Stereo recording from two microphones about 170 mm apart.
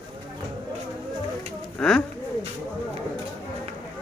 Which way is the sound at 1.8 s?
5° left (ahead or behind).